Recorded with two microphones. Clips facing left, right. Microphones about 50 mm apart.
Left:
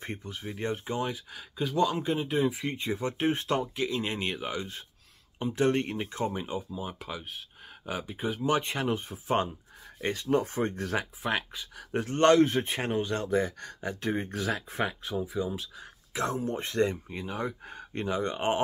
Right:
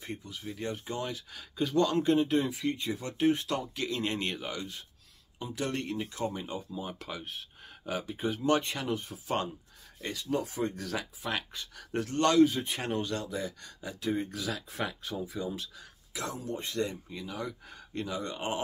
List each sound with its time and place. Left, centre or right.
0.0 s speech: left; by 2.5 s centre
2.5 s speech: left
3.7 s speech: centre
5.4 s speech: left; by 8.6 s centre
8.6 s speech: left
10.0 s speech: left
11.5 s speech: centre
12.2 s speech: left
12.8 s speech: left
13.2 s speech: left
15.2 s speech: centre
15.8 s speech: left